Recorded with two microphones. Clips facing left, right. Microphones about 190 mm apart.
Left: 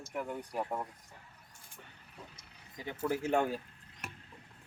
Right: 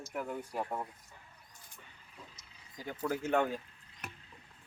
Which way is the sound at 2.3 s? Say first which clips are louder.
Left 2 dB; 60° left (ahead or behind).